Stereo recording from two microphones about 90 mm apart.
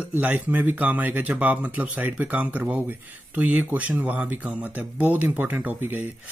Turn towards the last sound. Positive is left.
turn(degrees=-20)  # may be behind; listen again after turning